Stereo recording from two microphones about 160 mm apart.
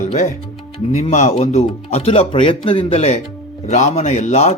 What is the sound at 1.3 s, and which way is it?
Speech, 35° left (ahead or behind).